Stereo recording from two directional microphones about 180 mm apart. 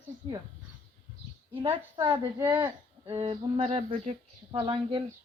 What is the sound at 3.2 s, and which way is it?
Mantra, 30° right (ahead or behind).